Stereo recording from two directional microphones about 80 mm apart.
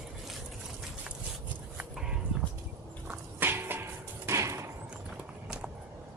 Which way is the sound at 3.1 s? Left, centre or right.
Right.